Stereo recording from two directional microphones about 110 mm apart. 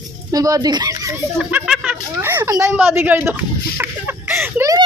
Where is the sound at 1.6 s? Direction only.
5° right (ahead or behind).